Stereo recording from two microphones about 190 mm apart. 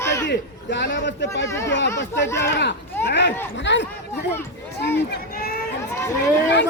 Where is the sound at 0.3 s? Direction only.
65° left (ahead or behind).